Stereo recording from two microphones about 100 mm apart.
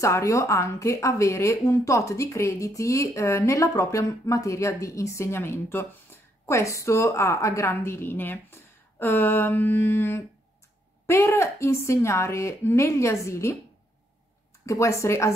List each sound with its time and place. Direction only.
0.0 s a woman's voice: 30° left (ahead or behind)
14.7 s a woman's voice: 30° left (ahead or behind)